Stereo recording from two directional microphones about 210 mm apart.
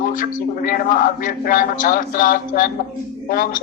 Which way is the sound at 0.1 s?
40° left (ahead or behind).